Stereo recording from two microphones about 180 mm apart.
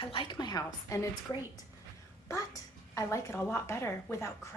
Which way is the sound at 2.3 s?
15° left (ahead or behind).